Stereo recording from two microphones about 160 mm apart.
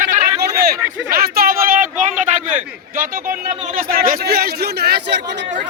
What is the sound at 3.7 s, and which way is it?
A man's voice, 60° right (ahead or behind).